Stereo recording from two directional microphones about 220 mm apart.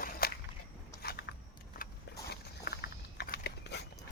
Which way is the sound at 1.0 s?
45° left (ahead or behind).